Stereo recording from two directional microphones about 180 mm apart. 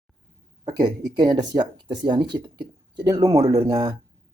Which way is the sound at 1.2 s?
20° right (ahead or behind).